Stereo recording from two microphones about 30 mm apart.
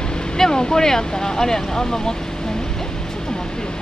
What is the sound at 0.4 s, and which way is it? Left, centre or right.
Speech, left.